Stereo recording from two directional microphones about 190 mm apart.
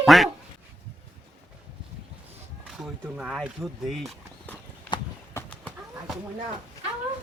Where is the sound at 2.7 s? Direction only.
5° right (ahead or behind).